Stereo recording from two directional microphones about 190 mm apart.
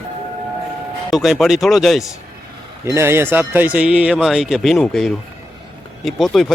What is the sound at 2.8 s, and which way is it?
Speech, 15° right (ahead or behind).